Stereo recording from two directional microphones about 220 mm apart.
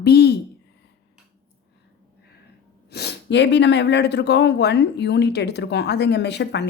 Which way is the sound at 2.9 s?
50° left (ahead or behind).